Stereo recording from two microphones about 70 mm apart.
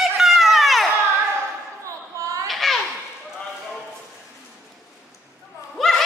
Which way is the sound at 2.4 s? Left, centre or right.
Centre.